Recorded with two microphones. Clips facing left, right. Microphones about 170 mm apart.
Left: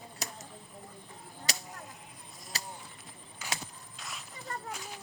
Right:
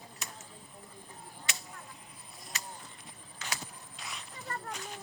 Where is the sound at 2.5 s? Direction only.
35° left (ahead or behind).